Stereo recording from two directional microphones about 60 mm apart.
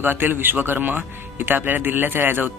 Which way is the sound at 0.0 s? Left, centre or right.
Right.